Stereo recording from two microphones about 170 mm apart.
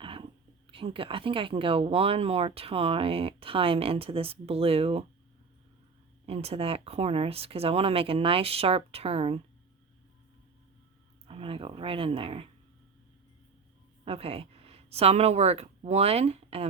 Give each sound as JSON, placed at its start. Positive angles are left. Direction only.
{"t": 0.0, "sound": "a sound", "side_deg": -30}
{"t": 0.7, "sound": "speech", "side_deg": -30}
{"t": 6.2, "sound": "speech", "side_deg": -35}
{"t": 11.3, "sound": "speech", "side_deg": -30}
{"t": 14.0, "sound": "a woman's voice", "side_deg": -35}